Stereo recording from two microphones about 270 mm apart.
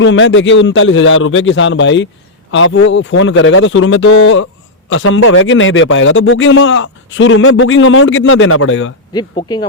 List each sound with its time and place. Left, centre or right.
0.0 s a man's voice: left
9.1 s speech: centre